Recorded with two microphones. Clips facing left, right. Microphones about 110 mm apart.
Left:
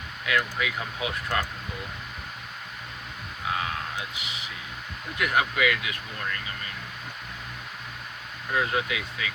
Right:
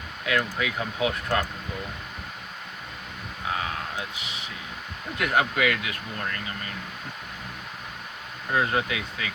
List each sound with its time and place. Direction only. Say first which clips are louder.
0.3 s speech: right 1 dB; 30° right (ahead or behind)
5.2 s speech: right 1 dB; 30° right (ahead or behind)
8.5 s speech: right 2 dB; 30° right (ahead or behind)